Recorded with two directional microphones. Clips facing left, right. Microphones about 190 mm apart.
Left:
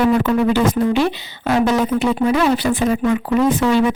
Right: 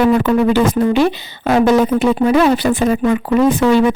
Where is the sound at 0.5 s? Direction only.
50° right (ahead or behind).